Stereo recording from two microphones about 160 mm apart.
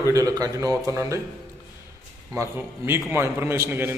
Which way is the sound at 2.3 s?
15° right (ahead or behind).